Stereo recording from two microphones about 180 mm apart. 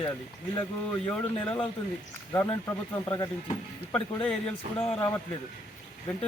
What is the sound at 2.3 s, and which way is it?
Speech, 20° left (ahead or behind).